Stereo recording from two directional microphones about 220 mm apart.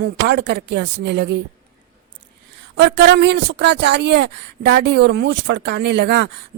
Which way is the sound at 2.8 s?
50° right (ahead or behind).